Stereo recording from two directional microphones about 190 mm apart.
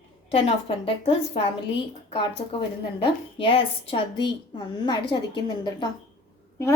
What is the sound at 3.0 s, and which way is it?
A woman's voice, 30° left (ahead or behind).